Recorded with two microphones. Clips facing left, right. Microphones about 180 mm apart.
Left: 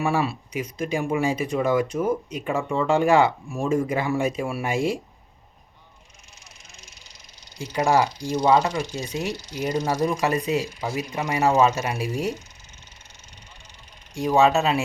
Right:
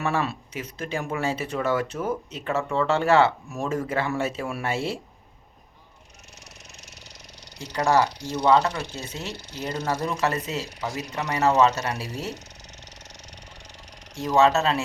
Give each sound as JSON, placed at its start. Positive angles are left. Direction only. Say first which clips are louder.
{"t": 0.0, "sound": "speech", "louder": "left 3 dB", "side_deg": 10}
{"t": 6.8, "sound": "a sound", "louder": "right 4 dB", "side_deg": -70}
{"t": 7.9, "sound": "speech", "louder": "even", "side_deg": 15}
{"t": 9.3, "sound": "speech", "louder": "left 5 dB", "side_deg": -60}
{"t": 9.8, "sound": "speech", "louder": "even", "side_deg": 15}
{"t": 14.2, "sound": "speech", "louder": "left 1 dB", "side_deg": 15}